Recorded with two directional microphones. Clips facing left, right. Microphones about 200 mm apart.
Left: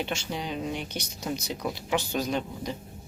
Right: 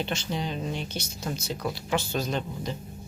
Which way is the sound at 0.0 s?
10° left (ahead or behind).